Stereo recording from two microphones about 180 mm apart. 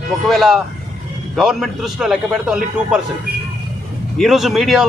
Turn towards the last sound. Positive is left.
turn(degrees=0)  # may be behind; listen again after turning